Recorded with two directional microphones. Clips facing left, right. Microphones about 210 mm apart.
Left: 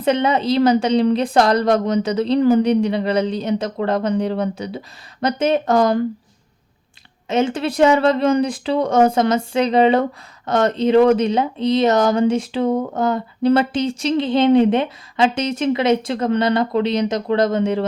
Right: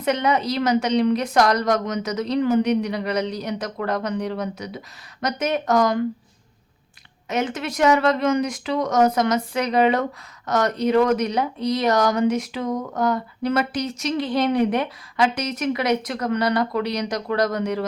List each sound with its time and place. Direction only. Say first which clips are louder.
0.0 s speech: left 4 dB; 30° left (ahead or behind)
7.3 s speech: left 6 dB; 25° left (ahead or behind)